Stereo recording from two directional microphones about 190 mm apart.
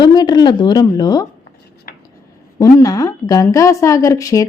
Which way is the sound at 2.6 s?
20° left (ahead or behind).